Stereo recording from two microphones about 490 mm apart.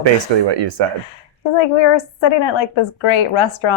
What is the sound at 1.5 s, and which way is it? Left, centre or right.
A woman's voice, left.